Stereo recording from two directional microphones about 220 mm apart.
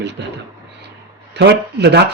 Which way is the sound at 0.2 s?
55° right (ahead or behind).